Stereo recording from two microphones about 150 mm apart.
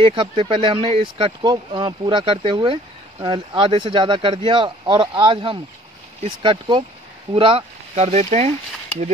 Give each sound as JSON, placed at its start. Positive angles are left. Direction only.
{"t": 0.0, "sound": "speech", "side_deg": -35}